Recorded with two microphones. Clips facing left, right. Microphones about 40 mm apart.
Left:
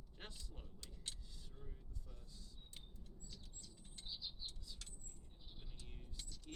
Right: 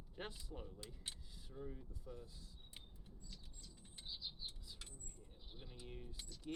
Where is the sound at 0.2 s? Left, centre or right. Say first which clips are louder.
Right 7 dB; centre.